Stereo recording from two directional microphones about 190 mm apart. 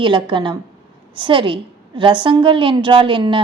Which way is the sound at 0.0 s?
25° right (ahead or behind).